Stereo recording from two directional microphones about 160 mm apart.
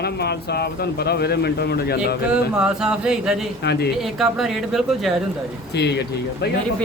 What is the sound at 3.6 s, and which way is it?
Speech, 90° left.